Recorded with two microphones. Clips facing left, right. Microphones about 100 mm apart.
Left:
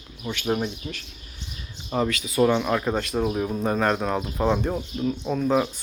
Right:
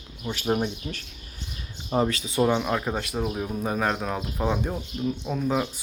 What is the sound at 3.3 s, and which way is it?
Speech, centre (ahead or behind).